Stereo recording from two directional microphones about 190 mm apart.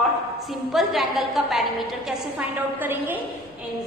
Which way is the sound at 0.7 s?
Centre (ahead or behind).